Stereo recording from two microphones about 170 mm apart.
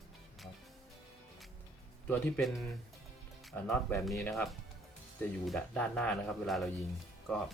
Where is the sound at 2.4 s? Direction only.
Centre (ahead or behind).